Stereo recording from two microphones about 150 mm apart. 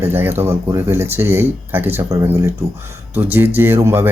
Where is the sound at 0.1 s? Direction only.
15° right (ahead or behind).